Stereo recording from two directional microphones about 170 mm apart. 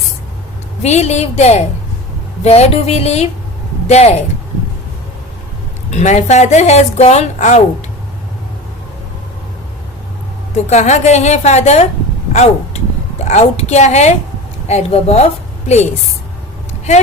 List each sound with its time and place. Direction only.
0.8 s a woman's voice: 40° left (ahead or behind)
5.9 s a woman's voice: 45° left (ahead or behind)
10.5 s a woman's voice: 45° left (ahead or behind)